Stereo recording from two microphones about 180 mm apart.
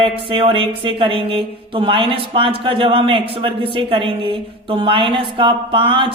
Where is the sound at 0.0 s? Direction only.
30° right (ahead or behind).